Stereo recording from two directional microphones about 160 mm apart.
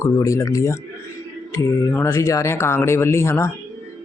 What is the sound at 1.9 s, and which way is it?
Speech, 20° left (ahead or behind).